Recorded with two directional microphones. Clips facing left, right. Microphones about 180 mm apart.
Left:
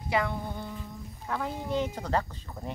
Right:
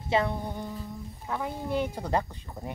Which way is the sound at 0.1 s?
20° right (ahead or behind).